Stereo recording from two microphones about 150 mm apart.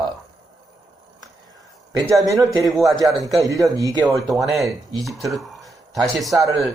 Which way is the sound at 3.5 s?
20° right (ahead or behind).